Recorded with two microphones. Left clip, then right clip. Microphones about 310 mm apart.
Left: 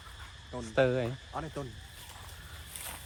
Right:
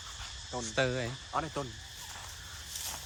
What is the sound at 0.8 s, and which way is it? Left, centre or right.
Speech, centre.